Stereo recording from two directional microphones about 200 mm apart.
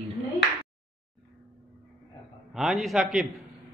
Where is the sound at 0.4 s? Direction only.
55° left (ahead or behind).